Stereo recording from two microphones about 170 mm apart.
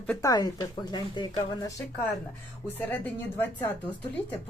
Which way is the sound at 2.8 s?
10° left (ahead or behind).